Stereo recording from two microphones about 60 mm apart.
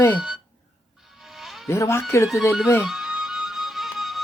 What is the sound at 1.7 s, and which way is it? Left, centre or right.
Speech, left.